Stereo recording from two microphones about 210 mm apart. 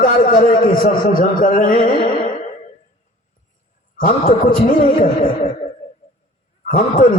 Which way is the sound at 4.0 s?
40° left (ahead or behind).